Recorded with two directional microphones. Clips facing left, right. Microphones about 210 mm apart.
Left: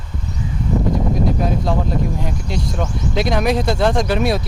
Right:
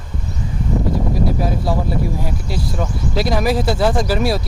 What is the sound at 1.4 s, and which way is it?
Speech, 5° right (ahead or behind).